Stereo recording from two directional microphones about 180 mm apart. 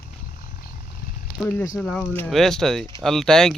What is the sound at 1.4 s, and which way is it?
Speech, 15° left (ahead or behind).